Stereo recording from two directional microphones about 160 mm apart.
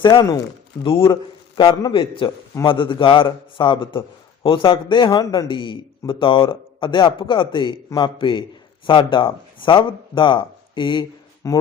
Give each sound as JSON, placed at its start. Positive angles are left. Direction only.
{"t": 0.0, "sound": "speech", "side_deg": 30}
{"t": 1.5, "sound": "a man's voice", "side_deg": 25}